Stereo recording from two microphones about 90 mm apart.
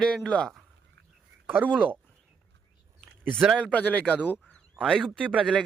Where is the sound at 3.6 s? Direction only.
15° left (ahead or behind).